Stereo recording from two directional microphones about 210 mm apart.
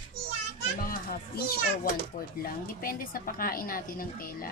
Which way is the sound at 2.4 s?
45° left (ahead or behind).